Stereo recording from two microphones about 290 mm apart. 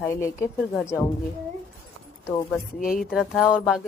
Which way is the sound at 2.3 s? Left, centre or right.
Centre.